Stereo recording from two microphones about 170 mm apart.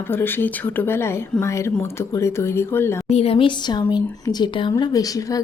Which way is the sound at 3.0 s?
35° left (ahead or behind).